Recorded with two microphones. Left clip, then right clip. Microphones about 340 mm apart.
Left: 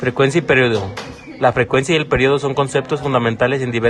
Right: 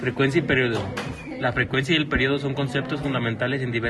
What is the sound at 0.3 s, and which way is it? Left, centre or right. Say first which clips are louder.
A man's voice: left 7 dB; left.